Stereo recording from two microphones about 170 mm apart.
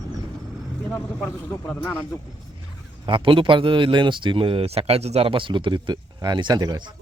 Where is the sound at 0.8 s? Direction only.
10° left (ahead or behind).